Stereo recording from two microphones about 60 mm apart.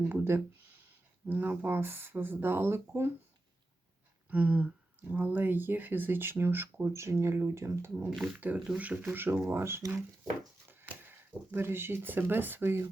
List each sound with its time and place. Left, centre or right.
0.1 s speech: right
4.3 s speech: right
8.2 s speech: right
10.7 s a sound: right
11.5 s speech: right